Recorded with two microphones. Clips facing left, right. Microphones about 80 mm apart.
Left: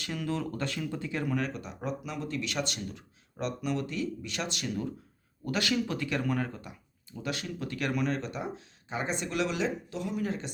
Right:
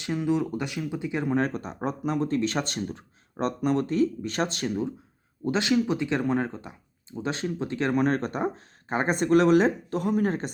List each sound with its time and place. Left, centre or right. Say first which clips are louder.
0.0 s speech: right 7 dB; right
1.4 s speech: right 7 dB; right
5.5 s speech: right 6 dB; right
8.0 s speech: right 7 dB; right